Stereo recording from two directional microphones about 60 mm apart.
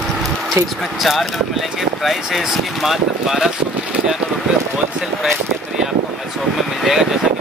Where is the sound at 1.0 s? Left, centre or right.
Centre.